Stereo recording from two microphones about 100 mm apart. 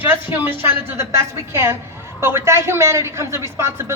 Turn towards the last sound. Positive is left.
turn(degrees=-25)  # may be behind; listen again after turning